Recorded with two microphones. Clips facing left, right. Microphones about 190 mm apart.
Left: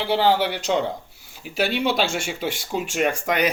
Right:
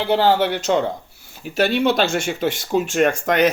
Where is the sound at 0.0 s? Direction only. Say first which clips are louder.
Right 3 dB; 45° right (ahead or behind).